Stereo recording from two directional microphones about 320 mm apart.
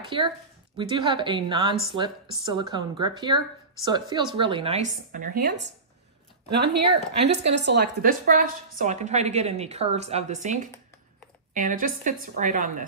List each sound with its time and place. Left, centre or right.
0.0 s a woman's voice: centre